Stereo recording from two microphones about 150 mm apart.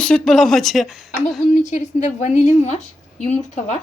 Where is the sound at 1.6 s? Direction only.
50° left (ahead or behind).